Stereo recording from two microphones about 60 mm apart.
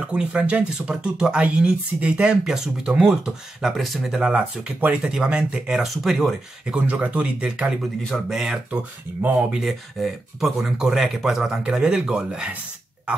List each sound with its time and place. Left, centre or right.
0.0 s speech: centre
4.2 s speech: centre
6.0 s speech: centre
6.9 s speech: right
8.3 s speech: centre